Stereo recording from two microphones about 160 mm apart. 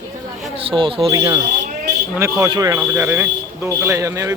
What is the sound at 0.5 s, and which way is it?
Speech, 35° right (ahead or behind).